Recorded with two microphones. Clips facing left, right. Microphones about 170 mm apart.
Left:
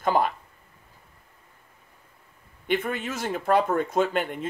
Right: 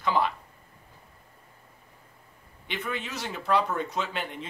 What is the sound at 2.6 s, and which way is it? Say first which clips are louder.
Speech: left 7 dB; 50° left (ahead or behind).